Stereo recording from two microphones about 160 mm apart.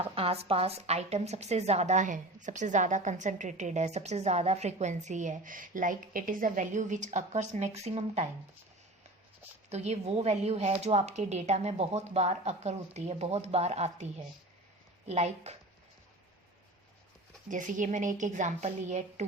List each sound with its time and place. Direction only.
0.0 s a woman's voice: 35° right (ahead or behind)
9.6 s a woman's voice: 45° right (ahead or behind)
17.5 s a woman's voice: 55° right (ahead or behind)